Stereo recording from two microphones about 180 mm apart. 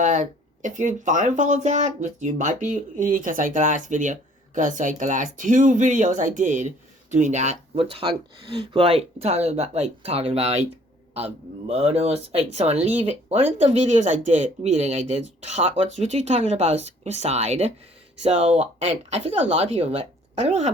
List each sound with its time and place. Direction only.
0.0 s speech: 45° right (ahead or behind)
11.7 s speech: 35° right (ahead or behind)